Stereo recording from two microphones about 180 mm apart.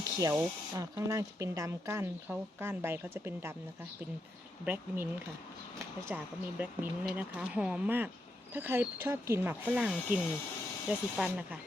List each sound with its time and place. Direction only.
0.2 s speech: 20° right (ahead or behind)
4.6 s speech: 10° right (ahead or behind)
6.1 s speech: 5° right (ahead or behind)